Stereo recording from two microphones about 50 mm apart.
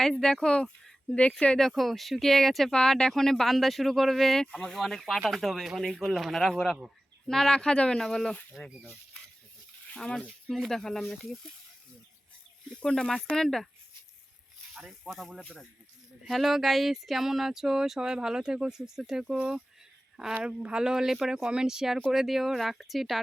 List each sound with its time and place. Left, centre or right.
0.0 s speech: centre
1.5 s speech: centre
2.7 s speech: centre
6.0 s speech: centre
10.0 s speech: centre
10.5 s speech: centre
12.9 s speech: centre
14.8 s speech: centre
15.1 s speech: centre
16.3 s a sound: centre
22.1 s speech: centre